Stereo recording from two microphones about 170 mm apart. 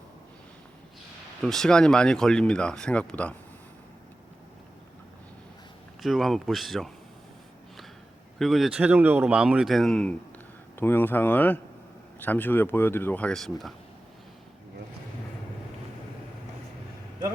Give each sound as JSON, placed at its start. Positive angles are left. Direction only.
{"t": 1.4, "sound": "speech", "side_deg": 0}
{"t": 6.0, "sound": "speech", "side_deg": 0}
{"t": 8.4, "sound": "speech", "side_deg": 0}